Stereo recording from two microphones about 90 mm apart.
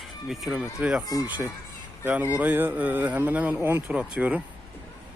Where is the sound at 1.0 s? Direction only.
45° left (ahead or behind).